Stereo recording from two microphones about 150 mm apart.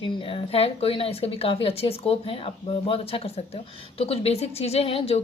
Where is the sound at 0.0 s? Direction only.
35° left (ahead or behind).